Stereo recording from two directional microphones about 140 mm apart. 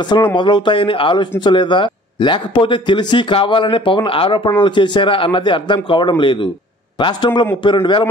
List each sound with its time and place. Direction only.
0.0 s speech: 30° left (ahead or behind)